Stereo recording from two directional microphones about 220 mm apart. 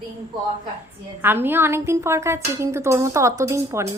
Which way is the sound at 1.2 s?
10° right (ahead or behind).